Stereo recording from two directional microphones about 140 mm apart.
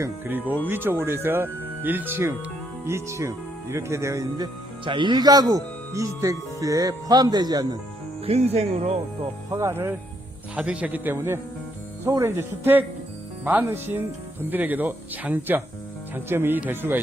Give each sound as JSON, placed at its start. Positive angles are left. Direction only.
{"t": 0.0, "sound": "speech", "side_deg": -15}
{"t": 4.9, "sound": "speech", "side_deg": -35}
{"t": 8.2, "sound": "speech", "side_deg": -50}
{"t": 9.5, "sound": "speech", "side_deg": -20}